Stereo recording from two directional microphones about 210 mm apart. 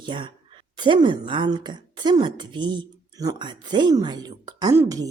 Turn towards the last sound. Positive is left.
turn(degrees=-15)  # may be behind; listen again after turning